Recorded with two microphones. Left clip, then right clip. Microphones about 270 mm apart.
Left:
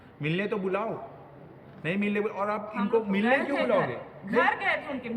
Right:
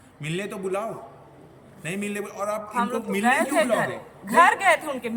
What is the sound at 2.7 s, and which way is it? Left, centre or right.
Speech, centre.